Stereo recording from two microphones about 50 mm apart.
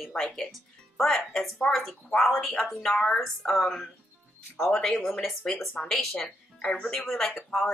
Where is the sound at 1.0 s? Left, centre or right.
Centre.